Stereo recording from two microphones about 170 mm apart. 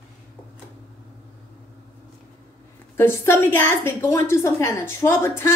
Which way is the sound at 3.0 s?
15° left (ahead or behind).